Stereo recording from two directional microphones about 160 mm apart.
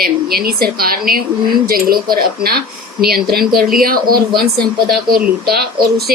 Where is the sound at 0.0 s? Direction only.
70° right (ahead or behind).